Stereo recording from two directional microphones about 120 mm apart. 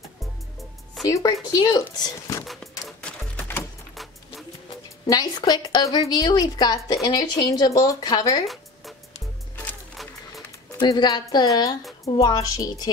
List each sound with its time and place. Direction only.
1.0 s speech: 30° left (ahead or behind)
2.4 s music: centre (ahead or behind)
5.0 s a woman's voice: 35° left (ahead or behind)
10.8 s a woman's voice: 35° left (ahead or behind)